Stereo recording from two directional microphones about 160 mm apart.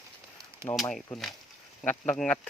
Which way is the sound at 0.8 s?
Centre (ahead or behind).